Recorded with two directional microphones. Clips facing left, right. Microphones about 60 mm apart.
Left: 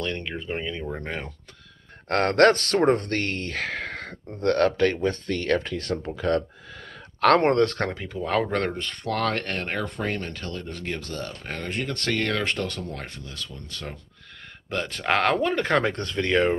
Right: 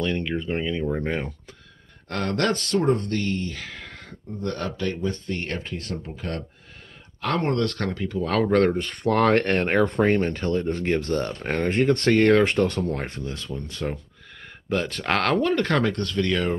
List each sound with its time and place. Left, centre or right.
0.0 s speech: centre
2.0 s speech: left
7.2 s speech: left
7.5 s speech: left
8.0 s speech: centre
8.7 s speech: centre
9.3 s speech: right
12.3 s speech: centre
13.7 s speech: centre
14.7 s speech: centre; by 16.4 s left